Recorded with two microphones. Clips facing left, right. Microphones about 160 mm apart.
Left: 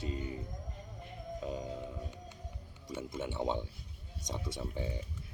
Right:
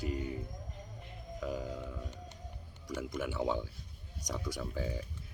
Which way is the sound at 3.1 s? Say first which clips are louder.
Right 1 dB; 25° left (ahead or behind).